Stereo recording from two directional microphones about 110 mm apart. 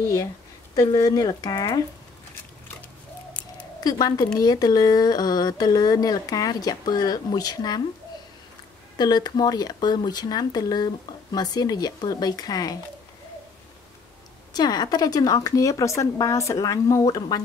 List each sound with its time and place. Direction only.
0.9 s speech: 35° left (ahead or behind)
3.8 s speech: 35° left (ahead or behind)
8.9 s speech: 40° left (ahead or behind)
14.5 s speech: 40° left (ahead or behind)